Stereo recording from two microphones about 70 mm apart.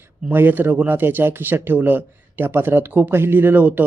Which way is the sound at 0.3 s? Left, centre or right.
Right.